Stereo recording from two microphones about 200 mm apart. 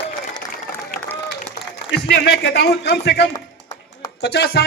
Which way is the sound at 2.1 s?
60° left (ahead or behind).